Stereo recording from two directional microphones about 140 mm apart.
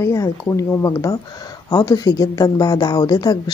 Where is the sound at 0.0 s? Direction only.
20° left (ahead or behind).